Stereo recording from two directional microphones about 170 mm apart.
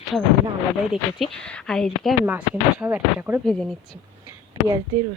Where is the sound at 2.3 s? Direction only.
10° right (ahead or behind).